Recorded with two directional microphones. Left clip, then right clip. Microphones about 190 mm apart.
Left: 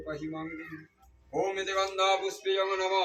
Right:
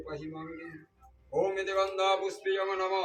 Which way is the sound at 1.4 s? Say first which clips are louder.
Even; 5° left (ahead or behind).